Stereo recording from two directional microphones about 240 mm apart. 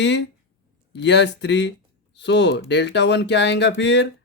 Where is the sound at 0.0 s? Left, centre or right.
Left.